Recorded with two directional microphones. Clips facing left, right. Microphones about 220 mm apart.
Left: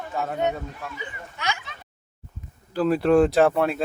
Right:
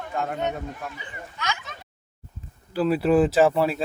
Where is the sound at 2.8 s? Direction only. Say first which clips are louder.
Left 1 dB; 5° right (ahead or behind).